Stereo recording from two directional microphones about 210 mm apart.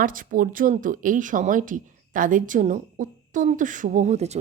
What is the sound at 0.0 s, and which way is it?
A woman's voice, 40° right (ahead or behind).